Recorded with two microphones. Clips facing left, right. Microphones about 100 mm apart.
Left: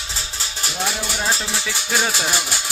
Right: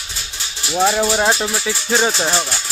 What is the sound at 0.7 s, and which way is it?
Speech, 60° right (ahead or behind).